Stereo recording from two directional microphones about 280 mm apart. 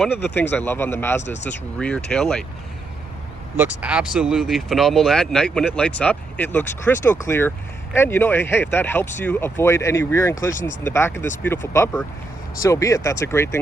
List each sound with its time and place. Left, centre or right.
0.0 s speech: centre
1.2 s speech: left
1.5 s speech: centre
3.6 s speech: centre
10.5 s speech: left
10.8 s speech: centre